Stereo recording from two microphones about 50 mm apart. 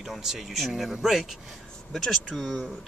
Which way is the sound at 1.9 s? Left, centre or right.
Centre.